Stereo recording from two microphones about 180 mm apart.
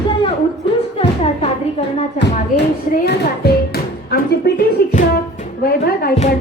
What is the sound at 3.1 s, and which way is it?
Music, 60° left (ahead or behind).